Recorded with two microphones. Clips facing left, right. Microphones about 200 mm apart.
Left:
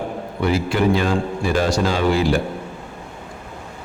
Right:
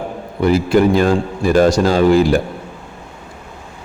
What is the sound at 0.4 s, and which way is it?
A man's voice, 40° right (ahead or behind).